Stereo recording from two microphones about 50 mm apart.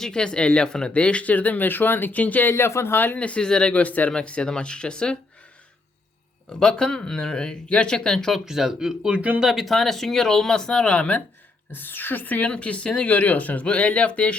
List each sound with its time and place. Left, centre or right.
0.0 s speech: centre
2.5 s speech: left
3.2 s speech: left
6.5 s speech: centre
8.4 s speech: centre
9.4 s speech: centre; by 11.2 s left
11.7 s speech: left